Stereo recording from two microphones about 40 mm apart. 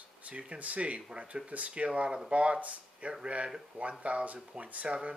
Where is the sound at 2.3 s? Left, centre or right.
Right.